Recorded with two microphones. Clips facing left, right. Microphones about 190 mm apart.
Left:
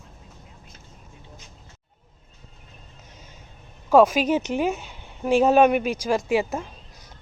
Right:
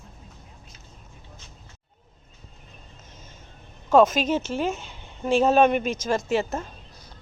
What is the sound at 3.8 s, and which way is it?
A woman's voice, 10° left (ahead or behind).